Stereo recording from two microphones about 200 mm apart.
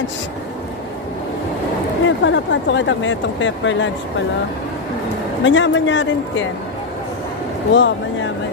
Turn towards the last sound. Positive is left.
turn(degrees=65)  # may be behind; listen again after turning